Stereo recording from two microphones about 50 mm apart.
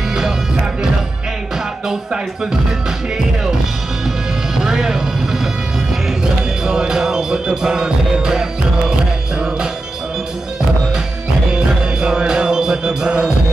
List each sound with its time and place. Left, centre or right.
4.6 s music: centre
6.6 s music: centre
12.0 s music: centre